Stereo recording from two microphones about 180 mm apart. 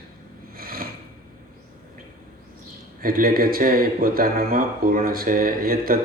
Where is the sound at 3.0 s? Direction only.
55° right (ahead or behind).